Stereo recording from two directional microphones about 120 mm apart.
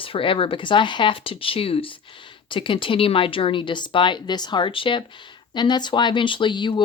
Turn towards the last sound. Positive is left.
turn(degrees=40)  # may be behind; listen again after turning